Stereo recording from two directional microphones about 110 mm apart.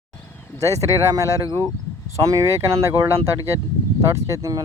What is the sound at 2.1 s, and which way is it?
Speech, 30° right (ahead or behind).